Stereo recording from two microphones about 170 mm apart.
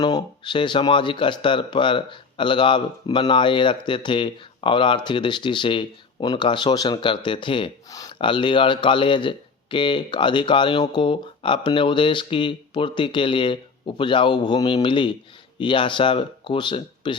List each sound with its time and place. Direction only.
0.0 s speech: 25° left (ahead or behind)